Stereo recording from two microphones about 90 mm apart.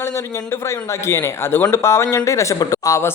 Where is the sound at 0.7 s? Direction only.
30° left (ahead or behind).